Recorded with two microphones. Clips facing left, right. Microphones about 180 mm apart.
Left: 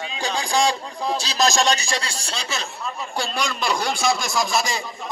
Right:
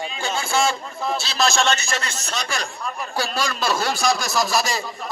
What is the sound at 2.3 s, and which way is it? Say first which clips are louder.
Speech: right 2 dB; 30° left (ahead or behind).